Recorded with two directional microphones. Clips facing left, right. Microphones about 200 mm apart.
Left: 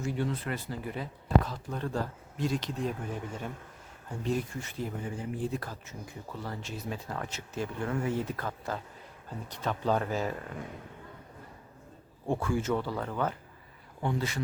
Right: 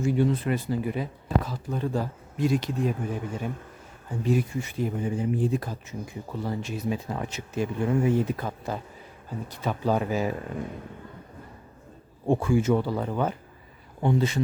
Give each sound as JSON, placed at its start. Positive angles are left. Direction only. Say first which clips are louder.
{"t": 0.0, "sound": "speech", "louder": "right 8 dB", "side_deg": -15}
{"t": 12.3, "sound": "speech", "louder": "right 7 dB", "side_deg": -15}